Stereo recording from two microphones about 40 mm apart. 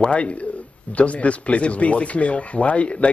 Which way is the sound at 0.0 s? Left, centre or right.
Left.